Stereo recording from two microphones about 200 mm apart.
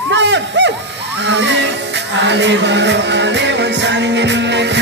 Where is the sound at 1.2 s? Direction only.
60° right (ahead or behind).